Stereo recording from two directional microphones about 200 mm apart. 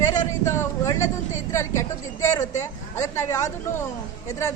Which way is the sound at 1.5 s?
15° left (ahead or behind).